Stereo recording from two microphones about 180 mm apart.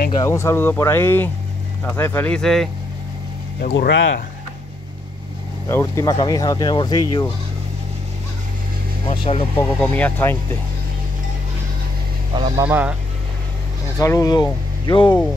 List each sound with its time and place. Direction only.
0.1 s speech: 15° left (ahead or behind)
3.7 s speech: 75° left (ahead or behind)
5.7 s speech: 15° left (ahead or behind)
9.0 s speech: 30° left (ahead or behind)
9.8 s speech: 10° left (ahead or behind)
12.5 s speech: 10° right (ahead or behind)
13.9 s speech: 20° left (ahead or behind)